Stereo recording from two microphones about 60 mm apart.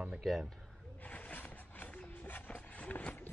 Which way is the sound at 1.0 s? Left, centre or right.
Left.